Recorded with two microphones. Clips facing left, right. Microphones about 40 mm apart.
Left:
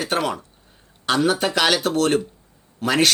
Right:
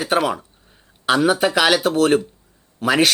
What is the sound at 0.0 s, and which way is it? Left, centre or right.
A man's voice, centre.